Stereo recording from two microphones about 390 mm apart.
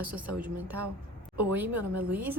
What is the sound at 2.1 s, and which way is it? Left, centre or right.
Speech, centre.